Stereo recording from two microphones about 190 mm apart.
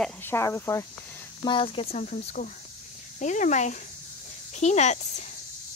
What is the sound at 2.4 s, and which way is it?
Speech, 45° left (ahead or behind).